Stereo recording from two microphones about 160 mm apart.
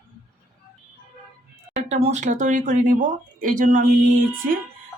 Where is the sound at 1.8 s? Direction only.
45° right (ahead or behind).